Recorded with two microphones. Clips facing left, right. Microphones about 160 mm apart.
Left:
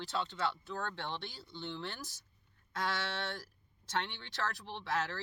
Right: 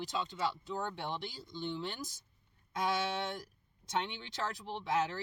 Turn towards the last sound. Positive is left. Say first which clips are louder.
# right 3 dB
turn(degrees=-20)  # may be behind; listen again after turning